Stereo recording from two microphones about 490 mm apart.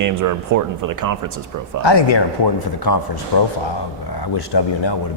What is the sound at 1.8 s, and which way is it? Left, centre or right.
Speech, left.